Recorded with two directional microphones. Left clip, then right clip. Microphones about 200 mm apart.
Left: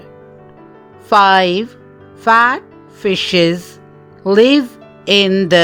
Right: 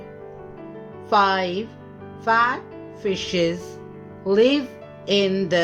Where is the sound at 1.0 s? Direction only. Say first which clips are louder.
Left 9 dB; 50° left (ahead or behind).